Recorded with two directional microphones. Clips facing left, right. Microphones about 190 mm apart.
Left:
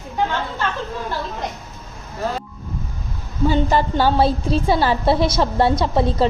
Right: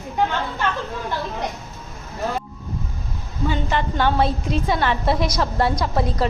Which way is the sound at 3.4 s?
40° left (ahead or behind).